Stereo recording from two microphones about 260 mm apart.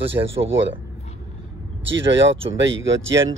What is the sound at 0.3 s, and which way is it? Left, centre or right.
Speech, right.